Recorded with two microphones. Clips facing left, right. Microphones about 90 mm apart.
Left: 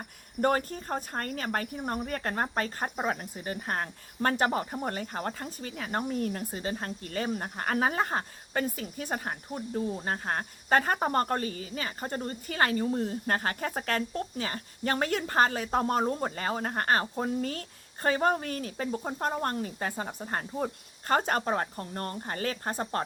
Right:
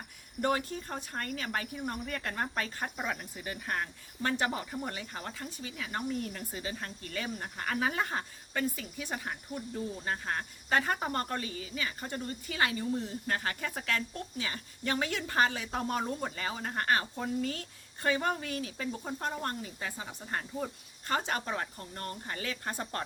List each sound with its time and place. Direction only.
0.4 s speech: 45° left (ahead or behind)